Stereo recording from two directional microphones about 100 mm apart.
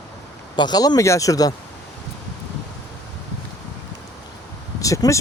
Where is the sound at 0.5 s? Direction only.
45° left (ahead or behind).